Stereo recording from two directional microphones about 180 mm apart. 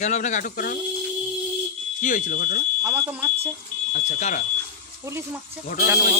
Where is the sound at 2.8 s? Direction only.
15° right (ahead or behind).